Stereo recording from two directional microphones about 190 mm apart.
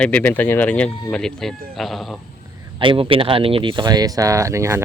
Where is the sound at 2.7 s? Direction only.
25° right (ahead or behind).